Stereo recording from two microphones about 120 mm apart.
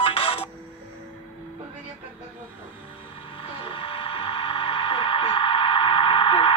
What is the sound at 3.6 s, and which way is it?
Mechanisms, 45° left (ahead or behind).